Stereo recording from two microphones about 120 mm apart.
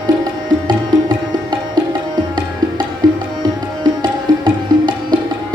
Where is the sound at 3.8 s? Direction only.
40° right (ahead or behind).